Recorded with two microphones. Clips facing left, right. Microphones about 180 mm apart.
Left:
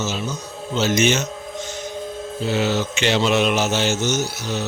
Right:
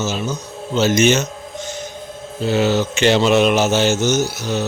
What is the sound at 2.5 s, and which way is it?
Speech, 45° right (ahead or behind).